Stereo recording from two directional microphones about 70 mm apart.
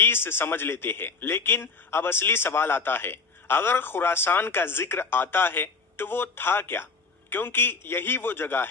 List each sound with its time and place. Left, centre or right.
0.0 s a man's voice: left